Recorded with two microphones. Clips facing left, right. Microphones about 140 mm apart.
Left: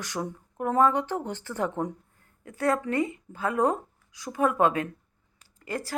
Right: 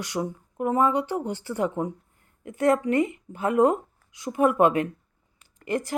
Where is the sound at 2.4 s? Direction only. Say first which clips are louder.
Right 5 dB; 20° right (ahead or behind).